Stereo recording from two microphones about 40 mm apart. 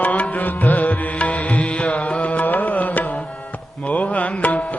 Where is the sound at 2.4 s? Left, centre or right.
Left.